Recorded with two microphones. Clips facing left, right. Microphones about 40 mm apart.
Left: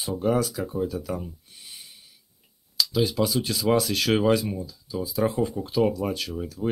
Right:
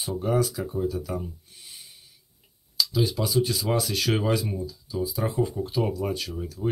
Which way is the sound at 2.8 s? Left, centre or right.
Left.